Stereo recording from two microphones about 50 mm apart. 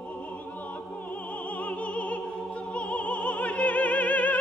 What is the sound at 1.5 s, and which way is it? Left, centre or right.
Opera, left.